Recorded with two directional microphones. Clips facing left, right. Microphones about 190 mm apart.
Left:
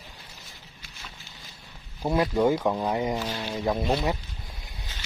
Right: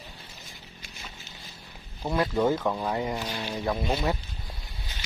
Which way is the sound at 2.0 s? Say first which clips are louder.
Left 2 dB; 25° left (ahead or behind).